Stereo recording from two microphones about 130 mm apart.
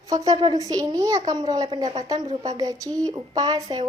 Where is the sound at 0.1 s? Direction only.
30° right (ahead or behind).